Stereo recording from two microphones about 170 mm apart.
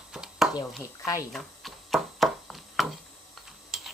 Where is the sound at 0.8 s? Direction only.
20° left (ahead or behind).